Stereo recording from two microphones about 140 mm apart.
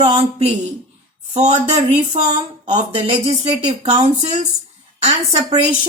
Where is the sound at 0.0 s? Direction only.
50° right (ahead or behind).